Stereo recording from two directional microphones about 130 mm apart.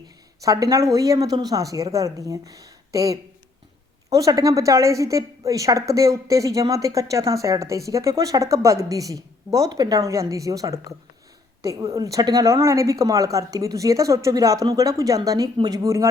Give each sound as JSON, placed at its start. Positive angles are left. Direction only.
{"t": 0.4, "sound": "a woman's voice", "side_deg": -25}